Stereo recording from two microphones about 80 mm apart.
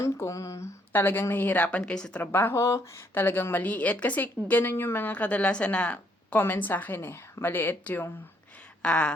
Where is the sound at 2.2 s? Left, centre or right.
Left.